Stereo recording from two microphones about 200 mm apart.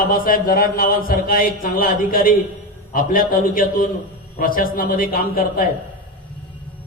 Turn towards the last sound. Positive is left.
turn(degrees=45)  # may be behind; listen again after turning